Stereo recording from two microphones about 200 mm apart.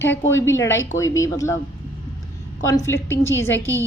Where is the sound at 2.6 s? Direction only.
15° left (ahead or behind).